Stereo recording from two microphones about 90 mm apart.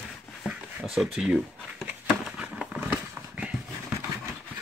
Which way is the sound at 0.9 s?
5° right (ahead or behind).